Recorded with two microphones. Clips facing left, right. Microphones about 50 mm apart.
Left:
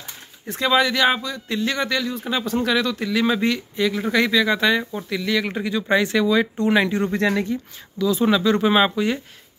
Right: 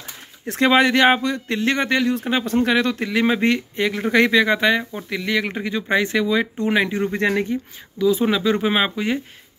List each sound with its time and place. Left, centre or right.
0.5 s speech: right
4.6 s speech: centre